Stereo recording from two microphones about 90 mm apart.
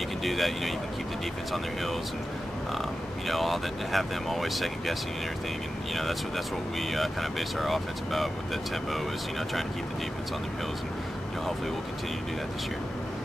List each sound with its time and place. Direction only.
0.2 s speech: centre (ahead or behind)
2.8 s speech: centre (ahead or behind)
5.9 s speech: centre (ahead or behind)